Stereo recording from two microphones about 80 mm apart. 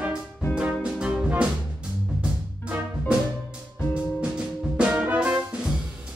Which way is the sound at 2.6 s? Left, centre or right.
Centre.